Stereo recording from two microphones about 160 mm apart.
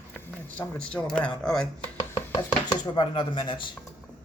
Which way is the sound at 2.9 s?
30° left (ahead or behind).